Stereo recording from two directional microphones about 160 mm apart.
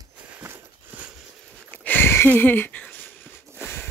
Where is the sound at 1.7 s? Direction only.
10° left (ahead or behind).